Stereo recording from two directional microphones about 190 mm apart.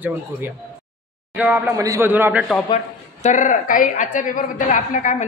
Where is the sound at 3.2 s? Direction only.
40° left (ahead or behind).